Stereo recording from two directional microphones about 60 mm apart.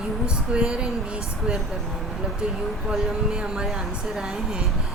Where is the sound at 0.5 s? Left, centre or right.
Centre.